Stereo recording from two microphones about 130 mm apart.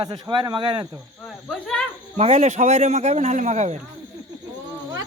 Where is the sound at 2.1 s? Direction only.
60° right (ahead or behind).